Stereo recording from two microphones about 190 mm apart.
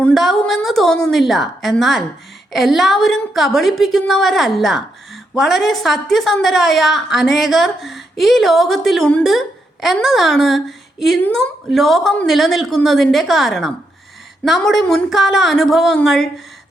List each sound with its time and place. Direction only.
0.0 s a woman's voice: centre (ahead or behind)